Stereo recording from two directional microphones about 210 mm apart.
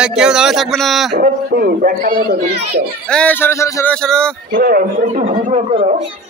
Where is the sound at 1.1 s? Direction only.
45° right (ahead or behind).